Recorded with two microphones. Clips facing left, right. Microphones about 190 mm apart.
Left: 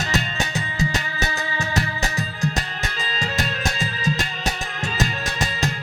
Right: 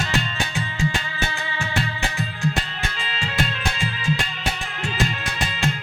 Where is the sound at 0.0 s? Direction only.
40° left (ahead or behind).